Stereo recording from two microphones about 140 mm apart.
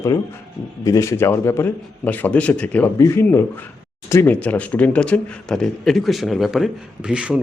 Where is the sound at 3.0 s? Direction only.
20° left (ahead or behind).